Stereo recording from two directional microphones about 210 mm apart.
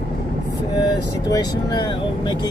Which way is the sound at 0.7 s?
20° left (ahead or behind).